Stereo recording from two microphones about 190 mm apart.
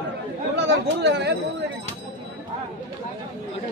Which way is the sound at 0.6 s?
60° right (ahead or behind).